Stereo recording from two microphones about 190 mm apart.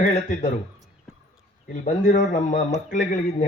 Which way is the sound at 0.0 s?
40° left (ahead or behind).